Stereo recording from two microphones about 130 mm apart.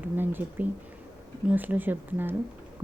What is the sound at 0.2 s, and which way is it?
Speech, 15° right (ahead or behind).